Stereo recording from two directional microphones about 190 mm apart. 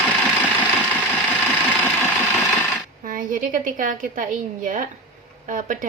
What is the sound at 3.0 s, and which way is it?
A woman's voice, 45° right (ahead or behind).